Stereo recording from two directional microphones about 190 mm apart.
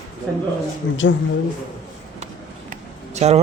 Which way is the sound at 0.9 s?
90° left.